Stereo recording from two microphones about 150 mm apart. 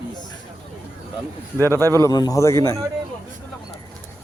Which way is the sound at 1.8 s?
20° left (ahead or behind).